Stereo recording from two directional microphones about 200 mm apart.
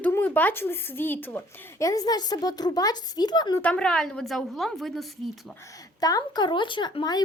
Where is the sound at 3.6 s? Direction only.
5° left (ahead or behind).